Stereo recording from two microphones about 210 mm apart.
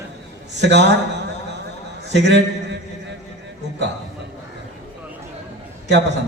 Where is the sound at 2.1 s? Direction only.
55° right (ahead or behind).